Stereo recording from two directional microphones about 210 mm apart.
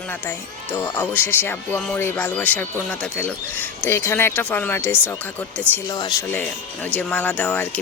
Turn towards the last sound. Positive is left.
turn(degrees=10)  # may be behind; listen again after turning